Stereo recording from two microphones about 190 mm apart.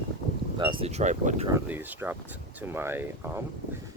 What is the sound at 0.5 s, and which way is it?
Speech, 25° right (ahead or behind).